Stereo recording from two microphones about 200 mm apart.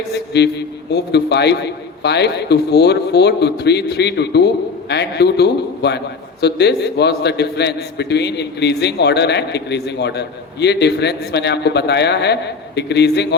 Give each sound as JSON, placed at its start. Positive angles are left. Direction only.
{"t": 0.1, "sound": "a man's voice", "side_deg": 55}